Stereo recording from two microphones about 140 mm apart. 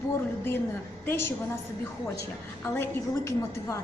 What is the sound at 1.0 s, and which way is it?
Speech, 15° left (ahead or behind).